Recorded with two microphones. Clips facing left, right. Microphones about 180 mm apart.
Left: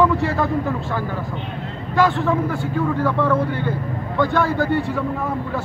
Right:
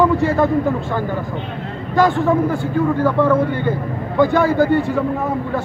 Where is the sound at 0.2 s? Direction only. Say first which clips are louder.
Right 5 dB; centre (ahead or behind).